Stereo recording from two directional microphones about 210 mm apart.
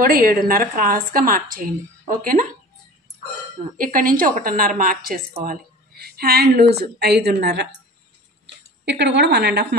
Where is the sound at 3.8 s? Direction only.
40° right (ahead or behind).